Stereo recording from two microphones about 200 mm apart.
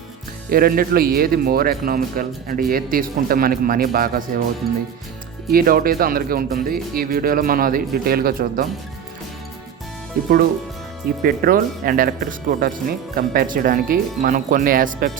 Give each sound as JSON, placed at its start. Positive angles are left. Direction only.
{"t": 0.5, "sound": "speech", "side_deg": -45}
{"t": 5.5, "sound": "speech", "side_deg": -45}
{"t": 11.2, "sound": "speech", "side_deg": -45}